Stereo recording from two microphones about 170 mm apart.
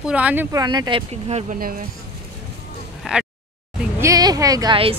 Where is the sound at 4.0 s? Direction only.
20° right (ahead or behind).